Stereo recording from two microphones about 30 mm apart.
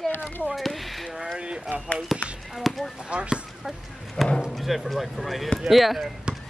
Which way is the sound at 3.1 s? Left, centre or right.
Right.